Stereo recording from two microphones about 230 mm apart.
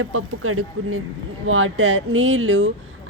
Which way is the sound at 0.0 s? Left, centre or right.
Right.